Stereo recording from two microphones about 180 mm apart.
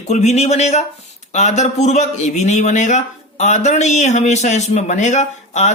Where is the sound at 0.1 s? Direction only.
40° left (ahead or behind).